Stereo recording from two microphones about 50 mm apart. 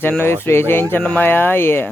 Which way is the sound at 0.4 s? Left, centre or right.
Left.